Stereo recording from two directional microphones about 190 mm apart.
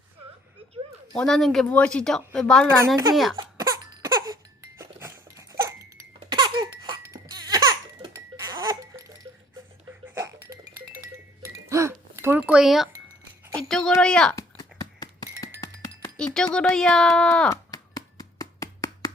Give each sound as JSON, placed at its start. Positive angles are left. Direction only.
{"t": 1.1, "sound": "speech", "side_deg": 5}
{"t": 2.8, "sound": "a child's voice", "side_deg": -20}
{"t": 3.3, "sound": "cough", "side_deg": -20}
{"t": 4.8, "sound": "a sound", "side_deg": -15}
{"t": 5.4, "sound": "laughter", "side_deg": -15}
{"t": 10.2, "sound": "music", "side_deg": -15}
{"t": 13.7, "sound": "a sound", "side_deg": 0}
{"t": 13.9, "sound": "speech", "side_deg": 5}
{"t": 14.3, "sound": "music", "side_deg": 20}
{"t": 16.1, "sound": "speech", "side_deg": 5}
{"t": 17.5, "sound": "a sound", "side_deg": 20}